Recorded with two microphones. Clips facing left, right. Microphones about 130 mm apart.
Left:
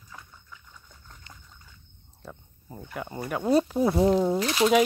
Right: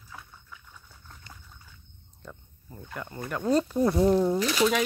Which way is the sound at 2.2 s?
5° left (ahead or behind).